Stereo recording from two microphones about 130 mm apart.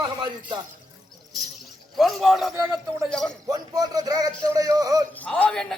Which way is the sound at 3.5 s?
30° right (ahead or behind).